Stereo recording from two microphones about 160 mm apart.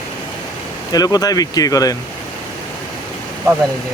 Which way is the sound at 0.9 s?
25° left (ahead or behind).